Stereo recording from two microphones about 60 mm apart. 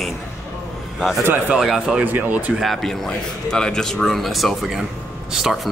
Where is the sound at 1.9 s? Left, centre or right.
Right.